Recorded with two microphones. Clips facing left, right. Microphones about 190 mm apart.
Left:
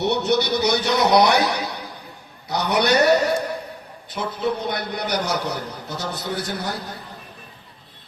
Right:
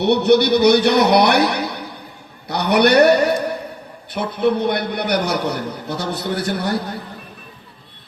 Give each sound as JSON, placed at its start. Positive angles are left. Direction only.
{"t": 0.0, "sound": "a man's voice", "side_deg": -60}